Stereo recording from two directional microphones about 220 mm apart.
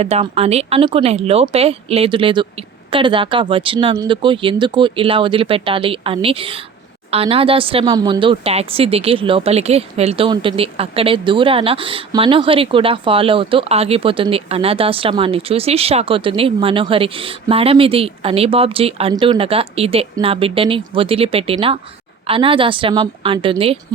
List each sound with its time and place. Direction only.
0.0 s speech: 25° right (ahead or behind)